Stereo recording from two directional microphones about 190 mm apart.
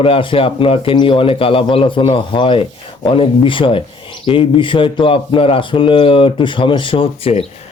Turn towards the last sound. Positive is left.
turn(degrees=30)  # may be behind; listen again after turning